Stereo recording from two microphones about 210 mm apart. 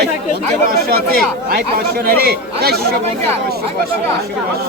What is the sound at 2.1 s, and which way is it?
Speech, 45° right (ahead or behind).